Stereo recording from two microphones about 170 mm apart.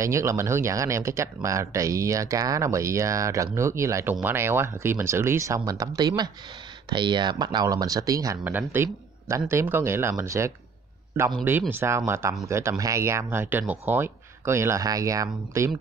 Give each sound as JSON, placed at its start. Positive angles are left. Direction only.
{"t": 0.0, "sound": "speech", "side_deg": -15}
{"t": 11.7, "sound": "speech", "side_deg": -15}